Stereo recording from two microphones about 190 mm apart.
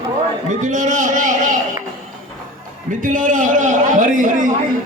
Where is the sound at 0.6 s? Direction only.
40° right (ahead or behind).